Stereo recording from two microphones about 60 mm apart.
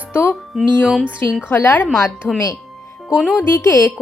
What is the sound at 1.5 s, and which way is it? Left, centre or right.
Speech, left.